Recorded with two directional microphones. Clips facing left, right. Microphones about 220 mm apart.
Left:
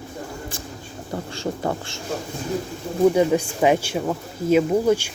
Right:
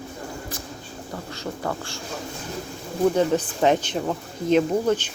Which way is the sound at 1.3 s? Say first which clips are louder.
Left 3 dB; 25° left (ahead or behind).